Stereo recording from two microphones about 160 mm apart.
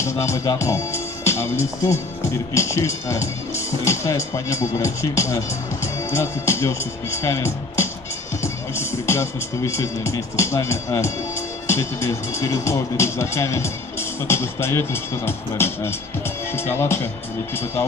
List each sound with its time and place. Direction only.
0.0 s speech: 20° left (ahead or behind)